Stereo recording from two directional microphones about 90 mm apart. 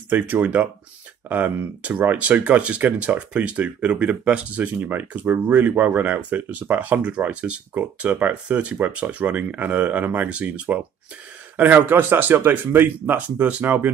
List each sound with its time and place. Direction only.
0.1 s speech: 20° right (ahead or behind)